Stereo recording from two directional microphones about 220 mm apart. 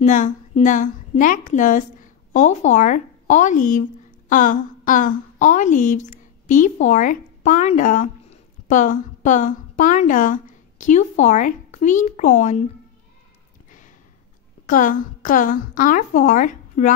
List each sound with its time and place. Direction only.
0.0 s a woman's voice: 35° left (ahead or behind)
13.7 s a sound: 35° left (ahead or behind)
14.7 s a woman's voice: 40° left (ahead or behind)